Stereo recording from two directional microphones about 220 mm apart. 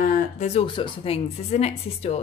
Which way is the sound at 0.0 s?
30° left (ahead or behind).